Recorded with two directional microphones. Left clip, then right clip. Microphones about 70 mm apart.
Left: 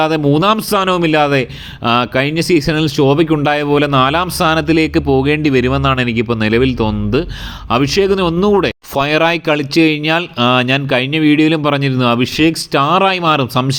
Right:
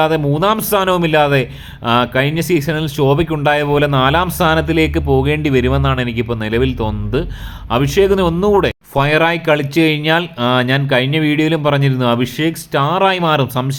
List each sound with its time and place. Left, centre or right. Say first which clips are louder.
0.7 s speech: left 1 dB; centre
1.8 s speech: left 1 dB; left
2.8 s speech: left 3 dB; centre
9.0 s speech: even; left
9.5 s speech: left 1 dB; left
10.4 s speech: left 2 dB; left
12.7 s speech: even; left